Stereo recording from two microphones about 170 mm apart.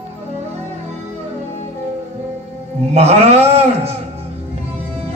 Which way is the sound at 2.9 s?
40° right (ahead or behind).